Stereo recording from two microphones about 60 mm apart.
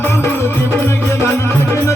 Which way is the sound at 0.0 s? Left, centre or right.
Left.